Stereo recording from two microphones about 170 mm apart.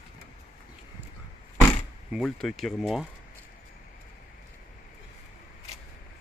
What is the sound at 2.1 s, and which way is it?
Speech, centre (ahead or behind).